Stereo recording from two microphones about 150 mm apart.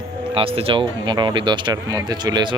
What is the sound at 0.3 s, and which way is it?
Speech, 40° right (ahead or behind).